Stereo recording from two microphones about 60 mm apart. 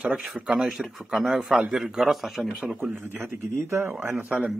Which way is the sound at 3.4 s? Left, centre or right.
Right.